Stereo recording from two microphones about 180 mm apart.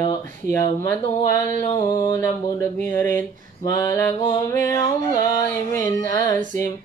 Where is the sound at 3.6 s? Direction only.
20° left (ahead or behind).